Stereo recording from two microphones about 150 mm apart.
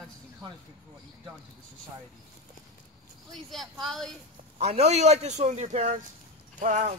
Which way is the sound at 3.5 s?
Centre (ahead or behind).